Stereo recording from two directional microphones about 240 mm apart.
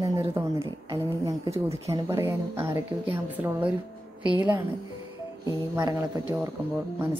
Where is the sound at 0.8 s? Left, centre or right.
Centre.